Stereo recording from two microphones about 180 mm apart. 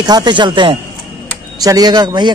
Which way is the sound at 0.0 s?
25° right (ahead or behind).